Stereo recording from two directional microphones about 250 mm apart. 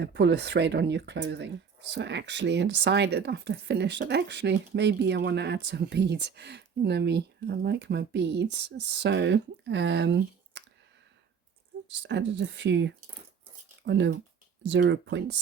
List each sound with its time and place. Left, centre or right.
0.0 s speech: right
11.9 s speech: right